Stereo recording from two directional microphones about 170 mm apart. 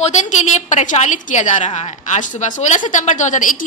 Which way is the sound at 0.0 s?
45° left (ahead or behind).